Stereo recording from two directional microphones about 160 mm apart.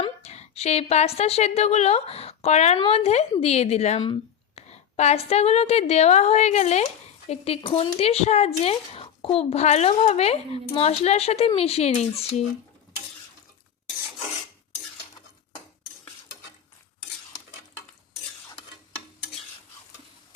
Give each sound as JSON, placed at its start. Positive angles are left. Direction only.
{"t": 0.0, "sound": "a woman's voice", "side_deg": 40}